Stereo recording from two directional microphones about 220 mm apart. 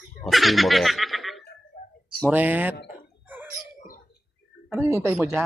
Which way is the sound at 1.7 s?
40° left (ahead or behind).